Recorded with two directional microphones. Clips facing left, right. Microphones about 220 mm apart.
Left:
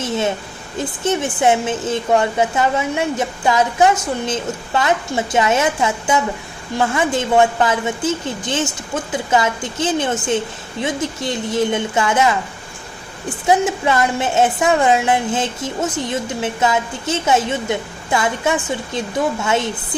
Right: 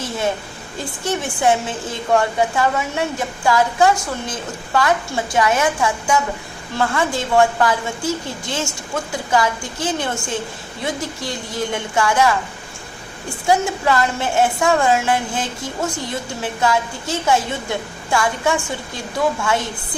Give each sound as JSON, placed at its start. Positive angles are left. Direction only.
{"t": 1.0, "sound": "a woman's voice", "side_deg": 20}
{"t": 13.5, "sound": "a woman's voice", "side_deg": 20}